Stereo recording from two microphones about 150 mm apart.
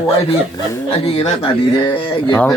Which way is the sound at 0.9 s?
40° left (ahead or behind).